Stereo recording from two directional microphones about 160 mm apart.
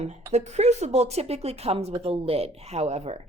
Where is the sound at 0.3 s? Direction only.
45° right (ahead or behind).